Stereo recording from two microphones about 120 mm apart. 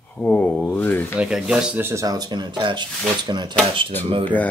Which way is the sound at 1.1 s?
5° right (ahead or behind).